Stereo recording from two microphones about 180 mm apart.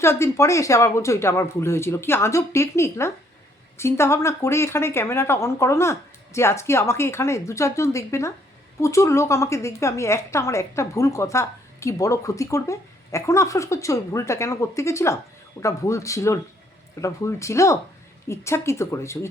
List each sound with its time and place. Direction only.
0.0 s a woman's voice: 15° left (ahead or behind)